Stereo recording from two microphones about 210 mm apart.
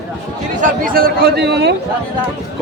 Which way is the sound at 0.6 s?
45° right (ahead or behind).